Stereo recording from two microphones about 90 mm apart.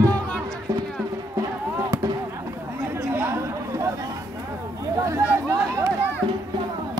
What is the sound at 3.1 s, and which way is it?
Chatter, 25° right (ahead or behind).